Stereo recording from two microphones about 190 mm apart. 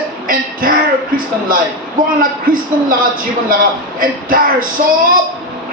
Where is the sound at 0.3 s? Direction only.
45° right (ahead or behind).